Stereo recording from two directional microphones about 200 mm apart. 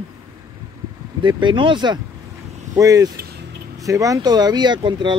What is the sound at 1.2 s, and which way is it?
Speech, 25° right (ahead or behind).